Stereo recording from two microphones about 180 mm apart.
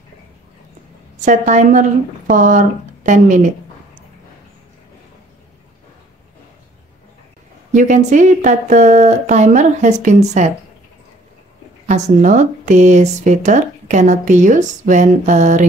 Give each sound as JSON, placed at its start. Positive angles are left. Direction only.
{"t": 1.2, "sound": "speech", "side_deg": -45}
{"t": 7.7, "sound": "speech", "side_deg": -45}
{"t": 11.9, "sound": "speech", "side_deg": -40}